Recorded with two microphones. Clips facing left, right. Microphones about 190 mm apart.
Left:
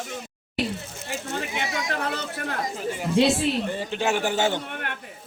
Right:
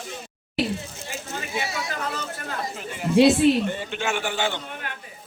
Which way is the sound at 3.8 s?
35° left (ahead or behind).